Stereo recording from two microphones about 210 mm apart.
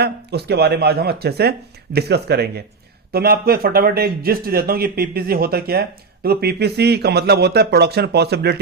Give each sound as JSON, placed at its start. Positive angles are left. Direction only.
{"t": 0.0, "sound": "a man's voice", "side_deg": -50}